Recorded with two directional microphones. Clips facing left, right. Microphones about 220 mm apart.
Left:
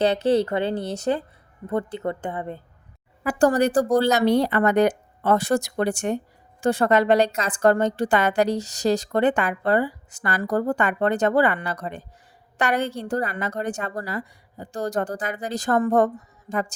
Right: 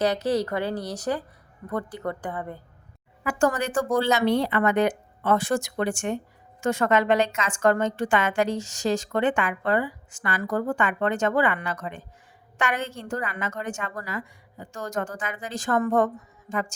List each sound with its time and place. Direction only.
0.0 s a woman's voice: 30° left (ahead or behind)
3.2 s a woman's voice: 35° left (ahead or behind)